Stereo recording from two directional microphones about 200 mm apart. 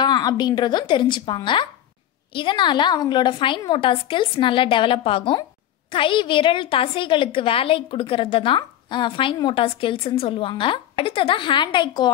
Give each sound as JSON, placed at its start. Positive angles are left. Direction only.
{"t": 0.0, "sound": "a woman's voice", "side_deg": 20}